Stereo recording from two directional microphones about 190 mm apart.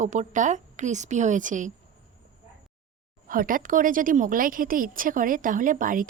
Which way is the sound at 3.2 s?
45° right (ahead or behind).